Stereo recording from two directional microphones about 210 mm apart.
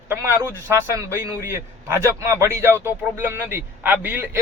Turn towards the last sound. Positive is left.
turn(degrees=-10)  # may be behind; listen again after turning